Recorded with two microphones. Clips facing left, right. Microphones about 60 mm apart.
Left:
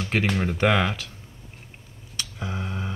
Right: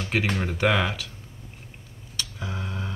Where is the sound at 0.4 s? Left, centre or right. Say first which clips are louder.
Left 2 dB; centre.